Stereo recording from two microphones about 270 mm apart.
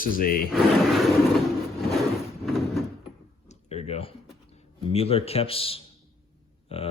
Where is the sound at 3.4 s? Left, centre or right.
Left.